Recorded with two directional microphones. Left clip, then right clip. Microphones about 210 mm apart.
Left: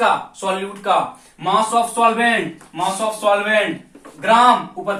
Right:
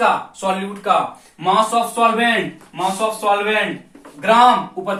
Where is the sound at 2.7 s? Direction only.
15° left (ahead or behind).